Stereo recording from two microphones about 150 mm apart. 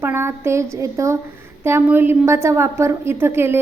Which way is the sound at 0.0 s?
15° right (ahead or behind).